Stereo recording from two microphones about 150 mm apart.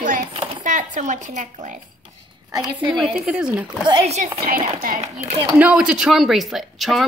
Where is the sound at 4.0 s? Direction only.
45° right (ahead or behind).